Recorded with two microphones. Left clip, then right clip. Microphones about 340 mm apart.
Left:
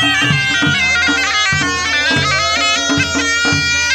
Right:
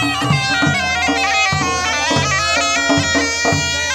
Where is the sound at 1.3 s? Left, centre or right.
Centre.